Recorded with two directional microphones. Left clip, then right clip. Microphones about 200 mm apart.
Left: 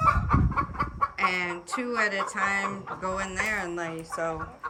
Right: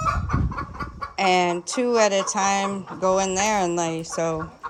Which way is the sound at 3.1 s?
15° left (ahead or behind).